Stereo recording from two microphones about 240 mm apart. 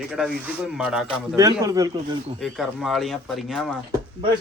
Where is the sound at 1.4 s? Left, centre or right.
Centre.